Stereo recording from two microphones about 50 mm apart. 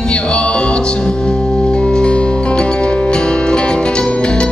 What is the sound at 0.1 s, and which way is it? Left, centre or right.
Music, left.